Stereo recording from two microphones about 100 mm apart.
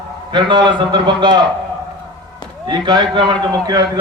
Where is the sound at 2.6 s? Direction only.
45° right (ahead or behind).